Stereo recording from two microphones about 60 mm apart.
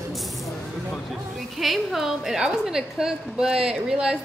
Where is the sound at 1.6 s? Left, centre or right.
Centre.